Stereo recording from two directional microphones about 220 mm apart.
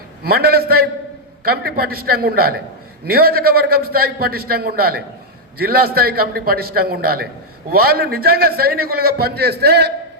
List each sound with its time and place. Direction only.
0.2 s a man's voice: 45° right (ahead or behind)